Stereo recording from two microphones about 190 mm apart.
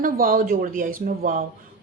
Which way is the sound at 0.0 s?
45° right (ahead or behind).